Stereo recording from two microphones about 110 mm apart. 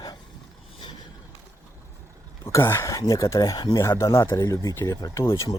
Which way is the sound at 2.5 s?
25° left (ahead or behind).